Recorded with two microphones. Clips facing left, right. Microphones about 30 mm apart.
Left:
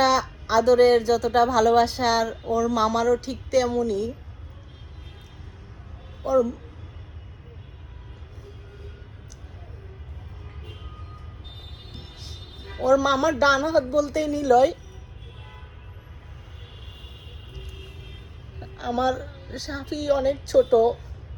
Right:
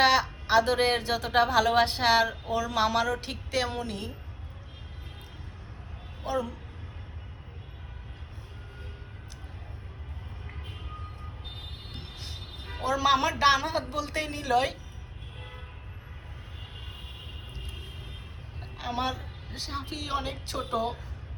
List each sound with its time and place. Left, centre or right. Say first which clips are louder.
0.0 s speech: left 2 dB; right
6.2 s speech: left 10 dB; right
12.6 s a woman's voice: left 6 dB; right
17.5 s vehicle: even; right
18.6 s a woman's voice: left 7 dB; right
19.5 s a woman's voice: left 5 dB; centre